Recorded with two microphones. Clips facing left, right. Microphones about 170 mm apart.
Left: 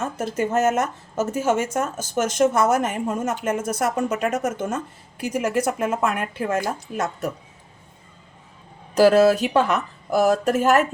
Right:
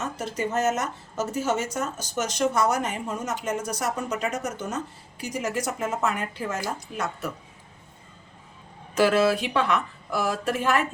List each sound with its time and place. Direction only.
0.0 s a woman's voice: 50° left (ahead or behind)
9.0 s speech: 40° left (ahead or behind)